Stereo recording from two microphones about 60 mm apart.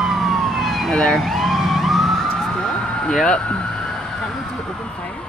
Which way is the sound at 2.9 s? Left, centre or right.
Centre.